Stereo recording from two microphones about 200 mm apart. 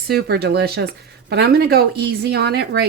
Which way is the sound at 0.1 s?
55° right (ahead or behind).